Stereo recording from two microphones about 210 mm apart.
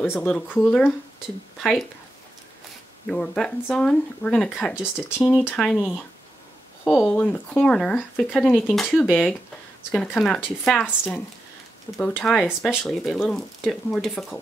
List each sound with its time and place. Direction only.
0.0 s speech: 10° left (ahead or behind)
3.1 s speech: 5° left (ahead or behind)